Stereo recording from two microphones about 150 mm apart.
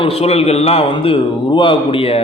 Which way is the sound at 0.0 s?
40° left (ahead or behind).